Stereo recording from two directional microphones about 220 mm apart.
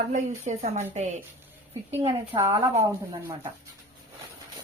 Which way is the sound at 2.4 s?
30° right (ahead or behind).